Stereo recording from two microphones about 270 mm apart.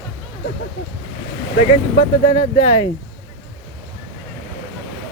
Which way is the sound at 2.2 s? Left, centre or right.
Left.